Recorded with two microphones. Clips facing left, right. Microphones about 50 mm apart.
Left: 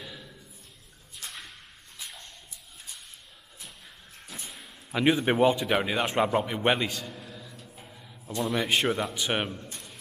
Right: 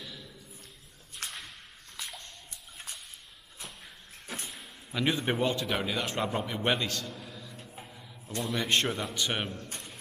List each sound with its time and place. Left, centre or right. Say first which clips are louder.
0.0 s a sound: left 2 dB; centre
1.2 s whip: right 2 dB; right
2.0 s bathtub: right 1 dB; right
5.1 s a man's voice: left 8 dB; centre